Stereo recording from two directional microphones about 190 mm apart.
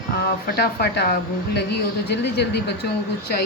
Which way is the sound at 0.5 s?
55° left (ahead or behind).